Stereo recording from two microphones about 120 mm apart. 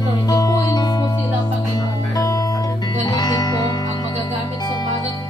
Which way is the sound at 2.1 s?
30° left (ahead or behind).